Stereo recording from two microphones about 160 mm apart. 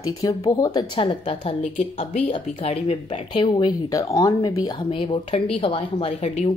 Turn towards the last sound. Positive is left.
turn(degrees=40)  # may be behind; listen again after turning